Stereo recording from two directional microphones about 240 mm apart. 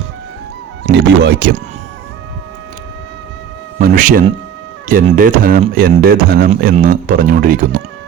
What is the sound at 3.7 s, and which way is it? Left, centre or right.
A man's voice, right.